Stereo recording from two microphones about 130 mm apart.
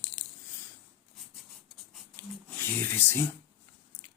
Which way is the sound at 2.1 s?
15° left (ahead or behind).